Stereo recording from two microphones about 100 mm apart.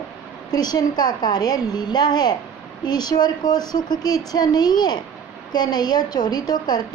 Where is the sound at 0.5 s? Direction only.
40° left (ahead or behind).